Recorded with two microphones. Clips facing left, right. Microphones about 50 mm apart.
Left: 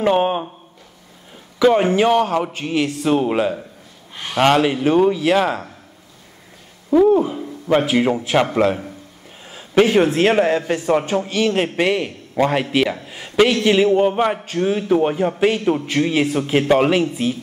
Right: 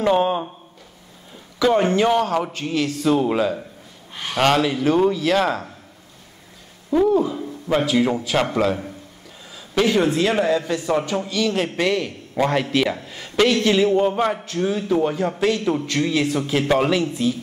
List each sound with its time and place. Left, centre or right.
0.0 s speech: left
1.8 s a man's voice: centre
7.1 s speech: left
9.5 s a sound: left
10.1 s a man's voice: left
15.1 s speech: centre